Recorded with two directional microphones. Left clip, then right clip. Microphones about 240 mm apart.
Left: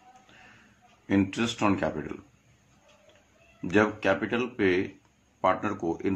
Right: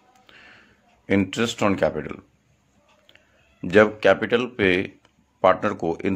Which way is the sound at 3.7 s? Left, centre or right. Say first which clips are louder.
Right 8 dB; right.